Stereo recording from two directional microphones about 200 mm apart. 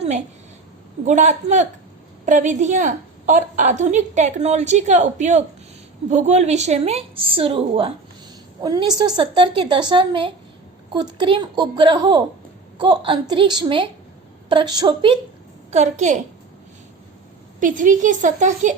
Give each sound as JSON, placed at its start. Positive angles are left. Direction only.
{"t": 1.0, "sound": "a woman's voice", "side_deg": -35}
{"t": 15.7, "sound": "a woman's voice", "side_deg": -35}
{"t": 17.6, "sound": "a woman's voice", "side_deg": -40}